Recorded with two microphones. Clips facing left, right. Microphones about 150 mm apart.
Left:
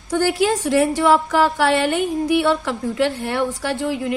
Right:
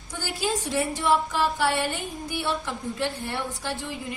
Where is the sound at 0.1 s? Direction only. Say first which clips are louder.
Left 11 dB; 90° left; by 2.0 s 70° left (ahead or behind).